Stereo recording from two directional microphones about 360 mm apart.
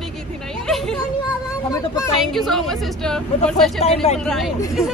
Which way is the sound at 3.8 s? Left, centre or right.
Centre.